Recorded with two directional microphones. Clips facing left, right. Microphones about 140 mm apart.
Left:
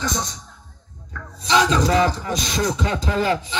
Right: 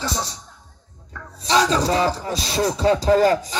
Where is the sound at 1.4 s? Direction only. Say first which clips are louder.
Even; 35° right (ahead or behind).